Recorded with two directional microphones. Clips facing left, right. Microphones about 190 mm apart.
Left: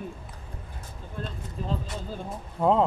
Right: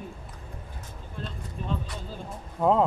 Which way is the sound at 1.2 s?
50° left (ahead or behind).